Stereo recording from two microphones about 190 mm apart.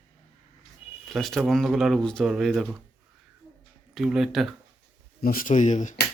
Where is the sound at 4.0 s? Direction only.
5° right (ahead or behind).